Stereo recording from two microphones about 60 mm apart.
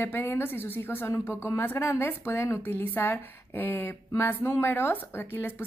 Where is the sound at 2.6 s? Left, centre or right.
Left.